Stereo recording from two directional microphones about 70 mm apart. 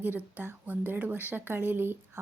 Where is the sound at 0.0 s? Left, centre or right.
Right.